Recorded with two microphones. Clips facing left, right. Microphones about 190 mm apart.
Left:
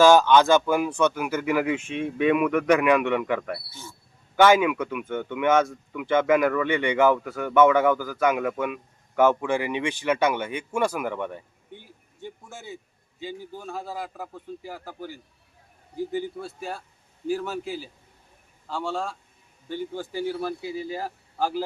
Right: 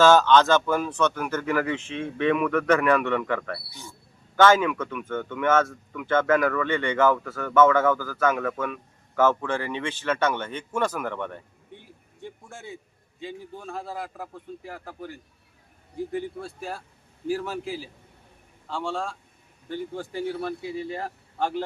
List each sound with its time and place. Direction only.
0.0 s speech: 10° left (ahead or behind)
3.7 s a man's voice: 15° right (ahead or behind)
4.4 s a man's voice: 10° left (ahead or behind)